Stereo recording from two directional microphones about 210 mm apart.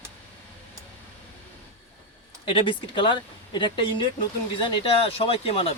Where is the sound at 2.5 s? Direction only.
25° left (ahead or behind).